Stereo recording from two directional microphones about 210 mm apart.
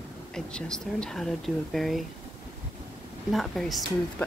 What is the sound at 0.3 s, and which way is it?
Speech, 5° left (ahead or behind).